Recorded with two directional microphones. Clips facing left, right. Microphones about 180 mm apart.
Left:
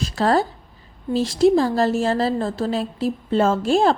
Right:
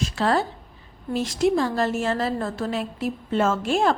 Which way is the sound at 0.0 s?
40° left (ahead or behind).